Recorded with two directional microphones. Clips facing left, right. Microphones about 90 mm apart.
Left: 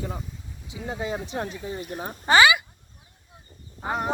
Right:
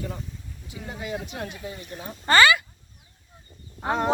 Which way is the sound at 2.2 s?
15° left (ahead or behind).